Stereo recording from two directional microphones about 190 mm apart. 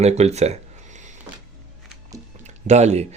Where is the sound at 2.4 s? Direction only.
35° right (ahead or behind).